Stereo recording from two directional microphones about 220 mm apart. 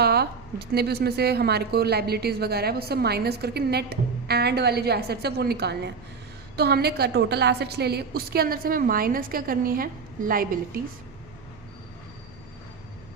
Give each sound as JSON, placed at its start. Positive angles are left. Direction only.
{"t": 0.0, "sound": "a woman's voice", "side_deg": -45}